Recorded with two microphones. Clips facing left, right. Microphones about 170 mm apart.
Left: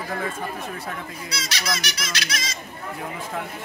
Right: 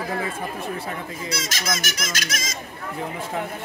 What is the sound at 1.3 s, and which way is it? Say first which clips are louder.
Speech: right 1 dB; 45° right (ahead or behind).